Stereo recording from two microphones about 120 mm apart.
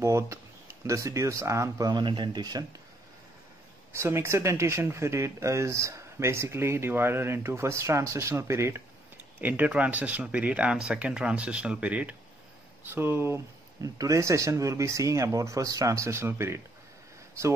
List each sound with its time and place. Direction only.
0.0 s speech: 25° right (ahead or behind)
3.9 s speech: 20° right (ahead or behind)